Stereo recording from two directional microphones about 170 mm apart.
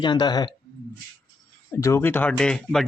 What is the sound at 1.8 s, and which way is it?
Speech, 15° left (ahead or behind).